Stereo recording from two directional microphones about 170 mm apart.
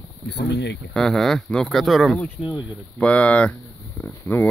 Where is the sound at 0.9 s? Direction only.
5° left (ahead or behind).